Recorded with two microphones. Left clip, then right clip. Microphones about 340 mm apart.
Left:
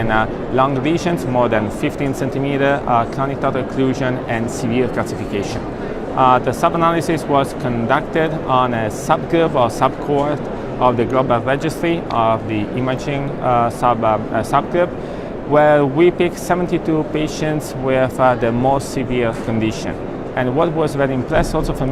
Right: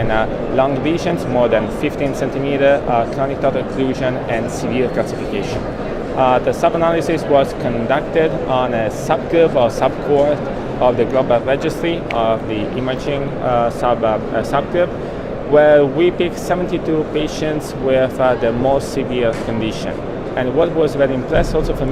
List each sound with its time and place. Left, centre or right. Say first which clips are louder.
0.1 s speech: left 1 dB; left
6.1 s speech: left 1 dB; left